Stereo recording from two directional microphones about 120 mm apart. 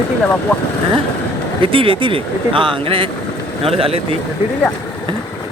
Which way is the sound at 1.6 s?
45° right (ahead or behind).